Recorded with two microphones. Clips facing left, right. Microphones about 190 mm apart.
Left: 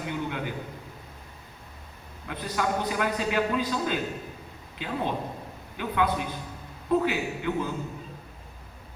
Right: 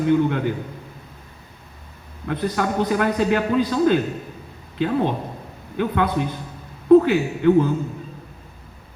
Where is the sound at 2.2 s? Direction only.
55° right (ahead or behind).